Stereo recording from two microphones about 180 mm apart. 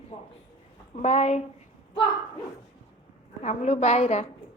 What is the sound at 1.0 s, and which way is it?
Speech, 35° left (ahead or behind).